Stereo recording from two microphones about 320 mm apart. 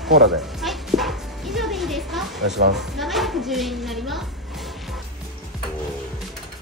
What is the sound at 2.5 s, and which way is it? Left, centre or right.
Speech, right.